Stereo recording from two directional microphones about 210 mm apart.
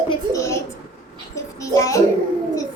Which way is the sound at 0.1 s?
15° left (ahead or behind).